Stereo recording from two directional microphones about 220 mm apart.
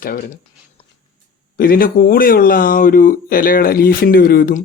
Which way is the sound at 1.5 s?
40° left (ahead or behind).